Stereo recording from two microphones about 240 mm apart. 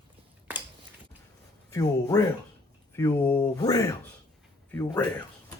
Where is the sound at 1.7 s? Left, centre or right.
Centre.